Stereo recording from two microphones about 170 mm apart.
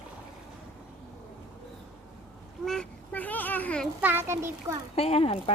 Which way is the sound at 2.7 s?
5° left (ahead or behind).